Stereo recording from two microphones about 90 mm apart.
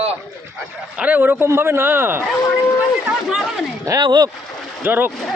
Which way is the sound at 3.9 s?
50° right (ahead or behind).